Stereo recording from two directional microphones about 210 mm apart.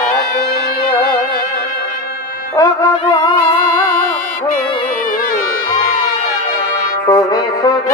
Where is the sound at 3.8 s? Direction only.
45° left (ahead or behind).